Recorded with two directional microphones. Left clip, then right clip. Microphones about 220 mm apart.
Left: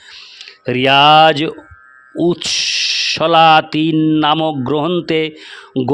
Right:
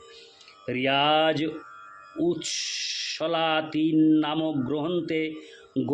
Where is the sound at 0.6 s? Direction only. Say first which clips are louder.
Left 14 dB; 50° left (ahead or behind).